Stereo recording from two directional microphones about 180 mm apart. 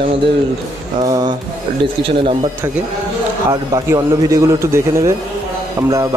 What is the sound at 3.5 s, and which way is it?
A man's voice, 20° right (ahead or behind).